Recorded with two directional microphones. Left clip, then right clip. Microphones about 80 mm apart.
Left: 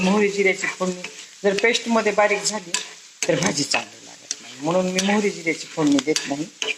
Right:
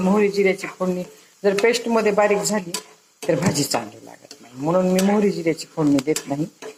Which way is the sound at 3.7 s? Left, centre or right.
Centre.